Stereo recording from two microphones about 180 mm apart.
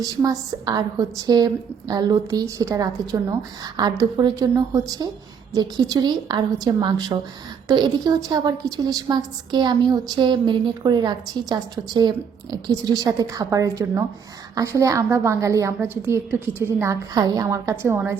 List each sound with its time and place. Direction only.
0.0 s a woman's voice: 20° right (ahead or behind)